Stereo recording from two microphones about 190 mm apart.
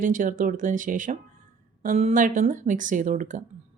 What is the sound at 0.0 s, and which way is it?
Speech, 45° right (ahead or behind).